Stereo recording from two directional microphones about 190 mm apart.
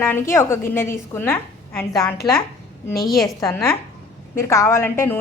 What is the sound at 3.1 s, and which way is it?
Speech, centre (ahead or behind).